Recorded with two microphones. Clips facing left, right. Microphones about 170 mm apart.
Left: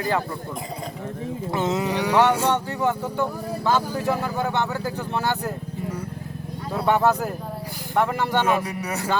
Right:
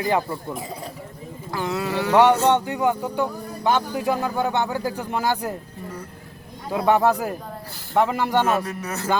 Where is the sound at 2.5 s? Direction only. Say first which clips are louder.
Right 2 dB; 15° right (ahead or behind).